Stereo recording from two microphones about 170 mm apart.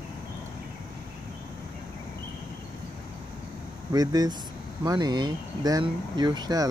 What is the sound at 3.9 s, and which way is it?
Speech, 25° right (ahead or behind).